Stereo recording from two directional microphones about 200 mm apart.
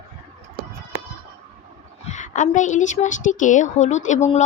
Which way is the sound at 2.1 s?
40° left (ahead or behind).